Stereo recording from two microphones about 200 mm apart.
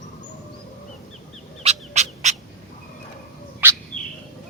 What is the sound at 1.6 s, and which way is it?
Bird, 35° right (ahead or behind).